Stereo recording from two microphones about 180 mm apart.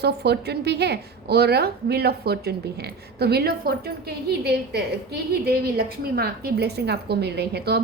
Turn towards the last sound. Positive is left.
turn(degrees=-65)  # may be behind; listen again after turning